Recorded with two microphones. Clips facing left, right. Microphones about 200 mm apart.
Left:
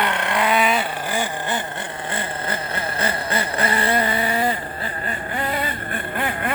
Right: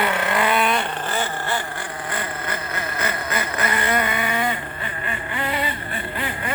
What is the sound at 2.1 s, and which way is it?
Vehicle, 30° left (ahead or behind).